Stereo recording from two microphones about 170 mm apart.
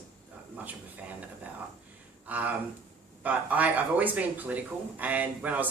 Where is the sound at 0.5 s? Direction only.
10° right (ahead or behind).